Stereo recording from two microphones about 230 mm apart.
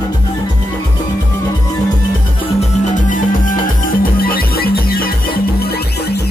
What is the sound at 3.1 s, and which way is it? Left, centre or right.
Music, left.